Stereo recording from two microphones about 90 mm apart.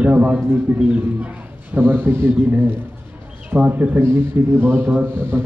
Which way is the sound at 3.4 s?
15° right (ahead or behind).